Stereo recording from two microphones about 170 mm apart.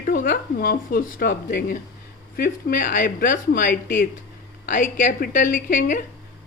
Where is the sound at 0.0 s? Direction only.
55° left (ahead or behind).